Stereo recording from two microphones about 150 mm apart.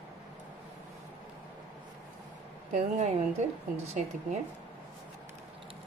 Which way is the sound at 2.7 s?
50° right (ahead or behind).